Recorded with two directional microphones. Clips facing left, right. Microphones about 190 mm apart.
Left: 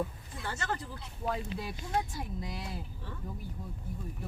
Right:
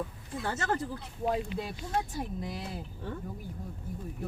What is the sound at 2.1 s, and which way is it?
Speech, 50° right (ahead or behind).